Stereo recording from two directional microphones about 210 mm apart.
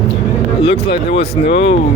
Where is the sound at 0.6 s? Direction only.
25° left (ahead or behind).